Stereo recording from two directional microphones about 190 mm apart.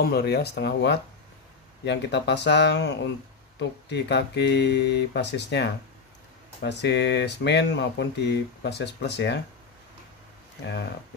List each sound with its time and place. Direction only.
0.0 s speech: 55° left (ahead or behind)
10.6 s speech: 65° left (ahead or behind)